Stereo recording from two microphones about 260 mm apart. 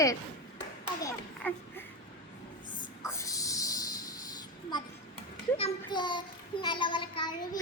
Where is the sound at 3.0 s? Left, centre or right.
Centre.